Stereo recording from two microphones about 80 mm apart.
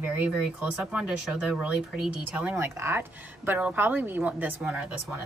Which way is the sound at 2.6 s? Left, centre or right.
Right.